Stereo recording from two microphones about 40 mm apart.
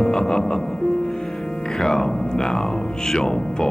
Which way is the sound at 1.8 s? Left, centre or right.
Centre.